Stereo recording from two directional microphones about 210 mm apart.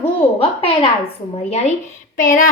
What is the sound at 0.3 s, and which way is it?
A woman's voice, 25° left (ahead or behind).